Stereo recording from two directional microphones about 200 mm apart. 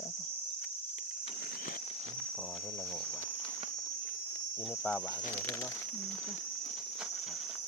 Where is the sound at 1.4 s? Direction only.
45° left (ahead or behind).